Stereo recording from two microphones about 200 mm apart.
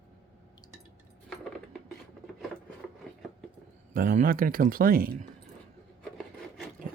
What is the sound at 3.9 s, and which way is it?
Speech, 45° right (ahead or behind).